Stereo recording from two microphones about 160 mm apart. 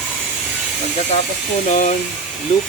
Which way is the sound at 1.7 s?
50° left (ahead or behind).